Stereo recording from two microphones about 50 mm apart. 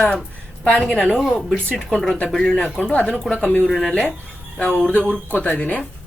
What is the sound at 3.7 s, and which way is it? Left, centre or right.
Speech, centre.